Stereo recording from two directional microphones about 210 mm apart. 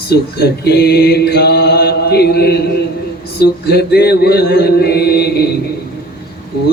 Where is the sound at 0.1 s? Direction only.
50° left (ahead or behind).